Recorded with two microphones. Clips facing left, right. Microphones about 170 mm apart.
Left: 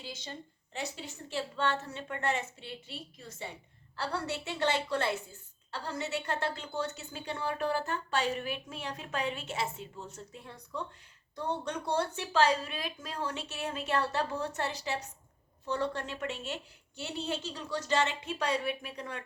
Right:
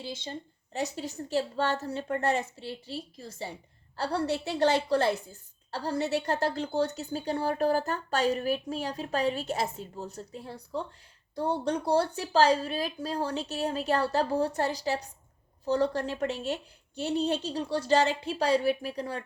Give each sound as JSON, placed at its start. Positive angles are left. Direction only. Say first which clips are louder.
{"t": 0.0, "sound": "a woman's voice", "louder": "right 6 dB", "side_deg": -30}